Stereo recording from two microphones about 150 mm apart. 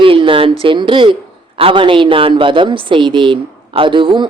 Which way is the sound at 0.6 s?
35° right (ahead or behind).